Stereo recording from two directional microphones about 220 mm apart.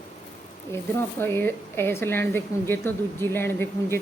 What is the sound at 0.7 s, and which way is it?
Speech, 10° left (ahead or behind).